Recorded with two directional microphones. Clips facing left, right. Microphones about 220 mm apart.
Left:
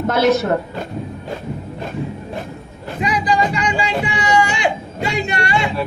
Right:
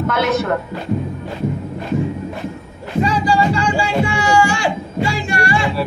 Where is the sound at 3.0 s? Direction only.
15° left (ahead or behind).